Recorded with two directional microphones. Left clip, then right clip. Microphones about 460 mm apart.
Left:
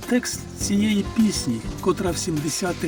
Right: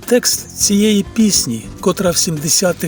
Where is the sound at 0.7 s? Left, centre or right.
Right.